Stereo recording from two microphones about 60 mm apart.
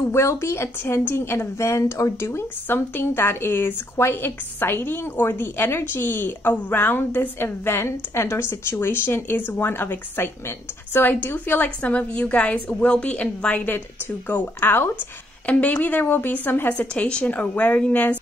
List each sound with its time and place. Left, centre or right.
0.1 s speech: left
2.2 s a woman's voice: left
14.3 s speech: left
15.4 s a woman's voice: left
16.7 s a woman's voice: centre